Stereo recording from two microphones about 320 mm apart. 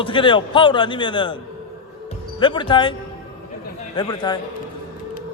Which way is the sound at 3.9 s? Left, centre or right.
Centre.